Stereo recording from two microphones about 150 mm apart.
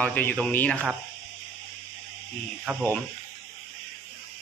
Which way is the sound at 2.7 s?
5° right (ahead or behind).